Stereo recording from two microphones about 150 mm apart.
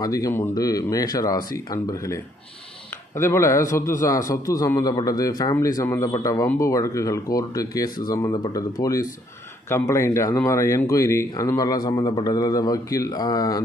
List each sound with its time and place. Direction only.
0.0 s speech: 25° left (ahead or behind)